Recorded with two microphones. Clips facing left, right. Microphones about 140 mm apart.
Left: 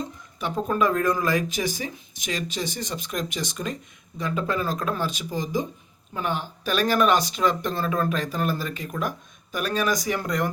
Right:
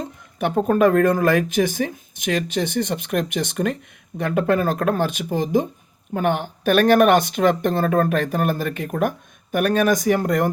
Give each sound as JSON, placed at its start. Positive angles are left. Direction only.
{"t": 0.0, "sound": "speech", "side_deg": -55}